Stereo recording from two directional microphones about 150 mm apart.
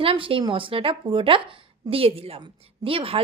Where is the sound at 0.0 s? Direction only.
40° right (ahead or behind).